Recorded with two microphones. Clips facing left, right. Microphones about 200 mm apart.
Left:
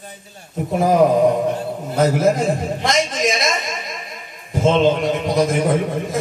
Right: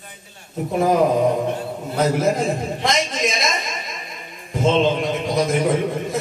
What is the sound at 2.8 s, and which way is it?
Speech, centre (ahead or behind).